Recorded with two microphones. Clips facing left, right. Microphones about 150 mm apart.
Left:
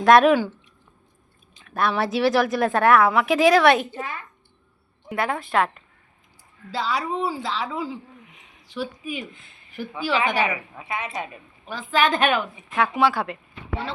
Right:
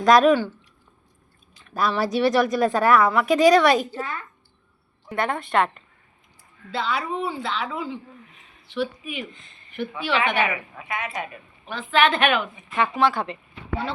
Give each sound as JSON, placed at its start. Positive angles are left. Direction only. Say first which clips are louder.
{"t": 0.0, "sound": "a woman's voice", "louder": "left 1 dB", "side_deg": 0}
{"t": 1.6, "sound": "a woman's voice", "louder": "even", "side_deg": 0}
{"t": 5.0, "sound": "a woman's voice", "louder": "even", "side_deg": 5}
{"t": 6.7, "sound": "speech", "louder": "left 1 dB", "side_deg": 35}
{"t": 8.3, "sound": "a sound", "louder": "left 1 dB", "side_deg": 15}
{"t": 8.6, "sound": "a woman's voice", "louder": "right 3 dB", "side_deg": 35}
{"t": 9.3, "sound": "speech", "louder": "even", "side_deg": 5}
{"t": 9.7, "sound": "a woman's voice", "louder": "even", "side_deg": 35}
{"t": 11.7, "sound": "speech", "louder": "right 1 dB", "side_deg": 40}
{"t": 12.7, "sound": "a woman's voice", "louder": "left 1 dB", "side_deg": 5}